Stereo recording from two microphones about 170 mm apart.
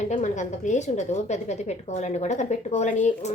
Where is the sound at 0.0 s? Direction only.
45° left (ahead or behind).